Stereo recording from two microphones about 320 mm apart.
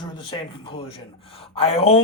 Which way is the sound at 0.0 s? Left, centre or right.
Centre.